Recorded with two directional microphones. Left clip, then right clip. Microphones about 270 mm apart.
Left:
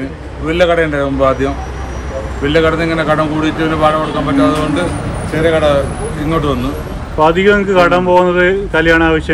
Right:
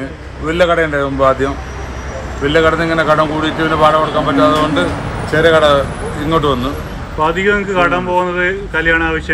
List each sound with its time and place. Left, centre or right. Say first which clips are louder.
0.5 s speech: left 1 dB; centre